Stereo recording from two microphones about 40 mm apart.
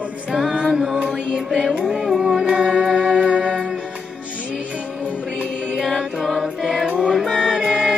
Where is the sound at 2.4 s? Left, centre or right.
Right.